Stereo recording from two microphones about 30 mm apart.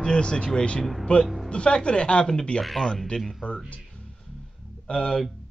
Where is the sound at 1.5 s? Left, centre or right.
Left.